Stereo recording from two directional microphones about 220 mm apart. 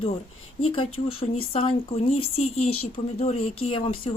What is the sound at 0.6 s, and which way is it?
A woman's voice, 25° left (ahead or behind).